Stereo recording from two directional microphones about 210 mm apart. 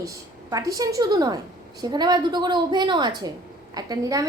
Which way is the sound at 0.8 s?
15° right (ahead or behind).